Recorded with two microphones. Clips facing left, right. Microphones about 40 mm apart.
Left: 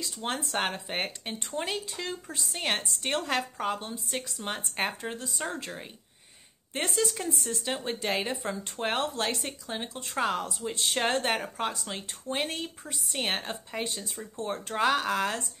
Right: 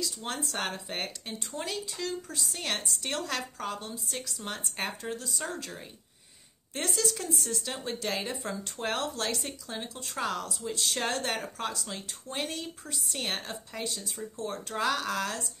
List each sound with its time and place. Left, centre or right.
0.0 s speech: left